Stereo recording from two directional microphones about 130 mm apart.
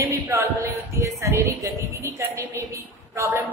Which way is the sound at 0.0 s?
25° right (ahead or behind).